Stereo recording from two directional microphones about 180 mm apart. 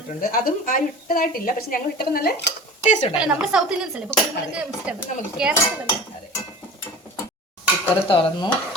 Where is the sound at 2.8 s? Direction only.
40° left (ahead or behind).